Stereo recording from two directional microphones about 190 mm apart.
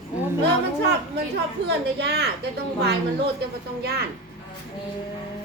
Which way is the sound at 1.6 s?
65° right (ahead or behind).